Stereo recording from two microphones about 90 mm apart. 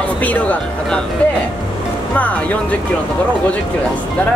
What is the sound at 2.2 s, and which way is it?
Speech, 15° left (ahead or behind).